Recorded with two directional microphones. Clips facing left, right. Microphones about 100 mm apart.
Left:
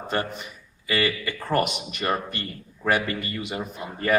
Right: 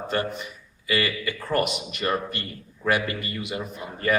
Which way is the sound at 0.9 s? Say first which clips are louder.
Left 1 dB; 30° left (ahead or behind).